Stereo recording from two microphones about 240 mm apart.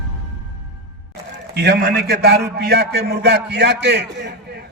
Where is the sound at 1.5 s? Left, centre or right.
Right.